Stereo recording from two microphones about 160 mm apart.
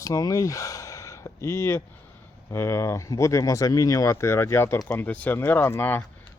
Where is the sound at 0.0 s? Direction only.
20° left (ahead or behind).